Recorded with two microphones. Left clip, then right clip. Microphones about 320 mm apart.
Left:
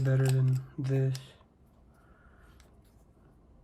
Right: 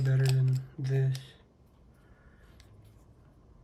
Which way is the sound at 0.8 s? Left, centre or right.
Centre.